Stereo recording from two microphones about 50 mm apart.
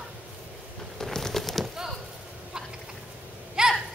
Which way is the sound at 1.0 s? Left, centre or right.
Centre.